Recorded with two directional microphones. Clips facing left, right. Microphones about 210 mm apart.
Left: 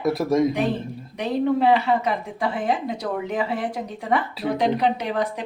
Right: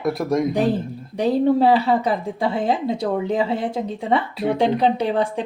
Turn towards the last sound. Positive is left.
turn(degrees=-30)  # may be behind; listen again after turning